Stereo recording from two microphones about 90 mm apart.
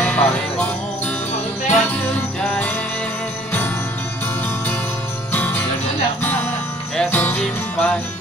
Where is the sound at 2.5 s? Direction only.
15° left (ahead or behind).